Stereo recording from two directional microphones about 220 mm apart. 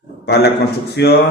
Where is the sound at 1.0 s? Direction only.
50° left (ahead or behind).